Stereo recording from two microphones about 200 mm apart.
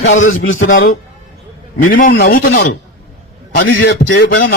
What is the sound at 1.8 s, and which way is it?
Speech, 45° left (ahead or behind).